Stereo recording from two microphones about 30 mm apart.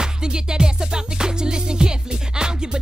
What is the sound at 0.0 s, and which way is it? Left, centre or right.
Music, right.